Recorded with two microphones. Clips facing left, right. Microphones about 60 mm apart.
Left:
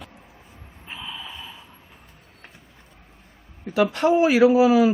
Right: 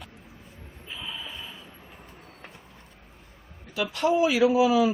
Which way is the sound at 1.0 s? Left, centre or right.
Centre.